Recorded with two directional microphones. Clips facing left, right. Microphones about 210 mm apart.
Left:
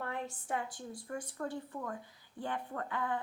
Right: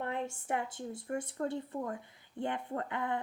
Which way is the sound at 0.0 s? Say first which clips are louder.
Right 3 dB; 20° right (ahead or behind).